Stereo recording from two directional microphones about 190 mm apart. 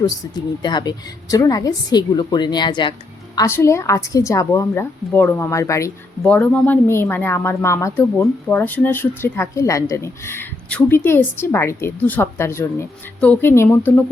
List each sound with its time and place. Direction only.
0.6 s a woman's voice: 20° left (ahead or behind)